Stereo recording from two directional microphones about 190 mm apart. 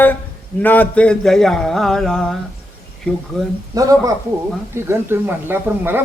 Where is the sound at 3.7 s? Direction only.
20° right (ahead or behind).